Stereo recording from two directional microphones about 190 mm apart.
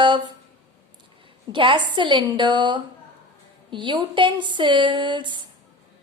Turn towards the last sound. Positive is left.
turn(degrees=-25)  # may be behind; listen again after turning